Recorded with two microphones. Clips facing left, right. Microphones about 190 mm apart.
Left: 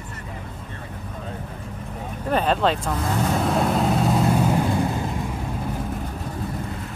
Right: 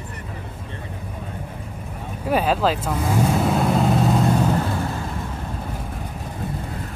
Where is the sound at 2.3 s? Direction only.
5° right (ahead or behind).